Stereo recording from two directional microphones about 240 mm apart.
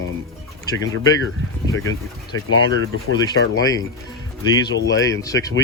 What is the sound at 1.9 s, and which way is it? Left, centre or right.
Speech, left.